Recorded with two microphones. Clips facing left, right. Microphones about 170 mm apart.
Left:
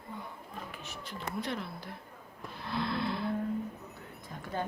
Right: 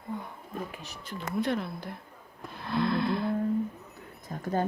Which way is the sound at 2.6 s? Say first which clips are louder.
Right 6 dB; 50° right (ahead or behind).